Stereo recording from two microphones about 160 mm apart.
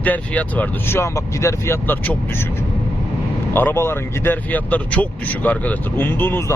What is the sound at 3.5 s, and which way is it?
Speech, 15° left (ahead or behind).